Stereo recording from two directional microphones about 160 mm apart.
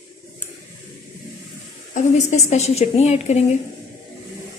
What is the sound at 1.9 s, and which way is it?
A woman's voice, 45° left (ahead or behind).